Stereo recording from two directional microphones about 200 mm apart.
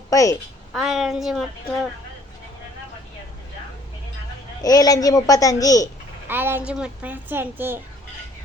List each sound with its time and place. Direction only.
0.1 s a woman's voice: 15° left (ahead or behind)
0.7 s a woman's voice: centre (ahead or behind)
4.6 s speech: 20° left (ahead or behind)
6.2 s speech: 10° right (ahead or behind)